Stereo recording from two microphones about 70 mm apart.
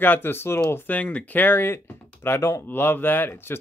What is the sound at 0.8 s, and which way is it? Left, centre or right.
Speech, left.